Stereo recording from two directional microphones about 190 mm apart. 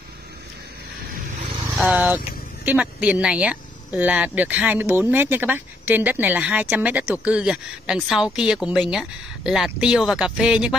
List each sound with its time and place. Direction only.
1.8 s speech: 10° right (ahead or behind)